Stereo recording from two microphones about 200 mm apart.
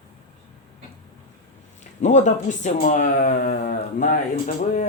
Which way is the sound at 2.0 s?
35° left (ahead or behind).